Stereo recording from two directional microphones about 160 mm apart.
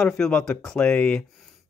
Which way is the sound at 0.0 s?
5° left (ahead or behind).